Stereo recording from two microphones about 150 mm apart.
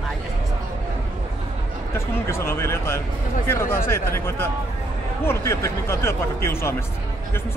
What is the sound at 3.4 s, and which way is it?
Speech, 15° left (ahead or behind).